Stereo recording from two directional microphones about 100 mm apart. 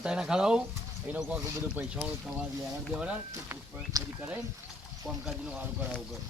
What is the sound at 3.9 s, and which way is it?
Speech, 40° right (ahead or behind).